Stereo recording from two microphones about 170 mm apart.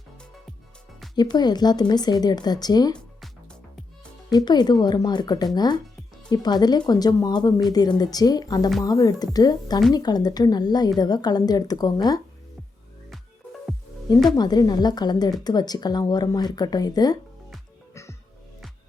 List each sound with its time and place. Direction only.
1.1 s speech: 25° left (ahead or behind)
4.3 s speech: 25° left (ahead or behind)
14.3 s speech: 25° left (ahead or behind)